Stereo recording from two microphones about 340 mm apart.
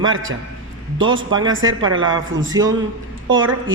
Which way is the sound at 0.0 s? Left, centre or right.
Right.